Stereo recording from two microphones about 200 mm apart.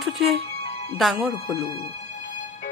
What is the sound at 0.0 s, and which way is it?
Music, centre (ahead or behind).